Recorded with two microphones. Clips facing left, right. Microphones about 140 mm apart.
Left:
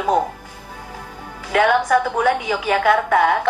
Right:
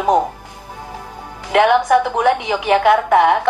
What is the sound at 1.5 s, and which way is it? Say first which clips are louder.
A woman's voice: right 3 dB; 25° right (ahead or behind).